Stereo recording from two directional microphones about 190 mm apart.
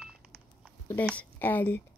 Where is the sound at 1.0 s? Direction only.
10° left (ahead or behind).